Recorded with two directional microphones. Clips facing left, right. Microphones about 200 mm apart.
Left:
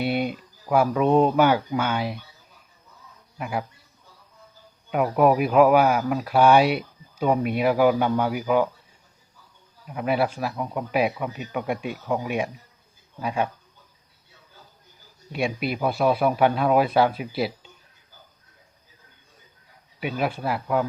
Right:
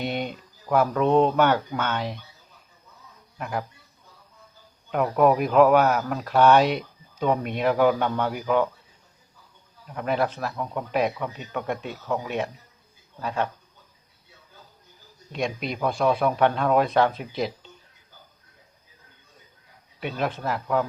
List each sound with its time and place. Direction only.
0.0 s speech: 10° left (ahead or behind)
3.3 s speech: 10° left (ahead or behind)
4.9 s speech: 5° left (ahead or behind)
9.8 s speech: 5° left (ahead or behind)
15.3 s speech: 5° left (ahead or behind)
20.0 s speech: 10° left (ahead or behind)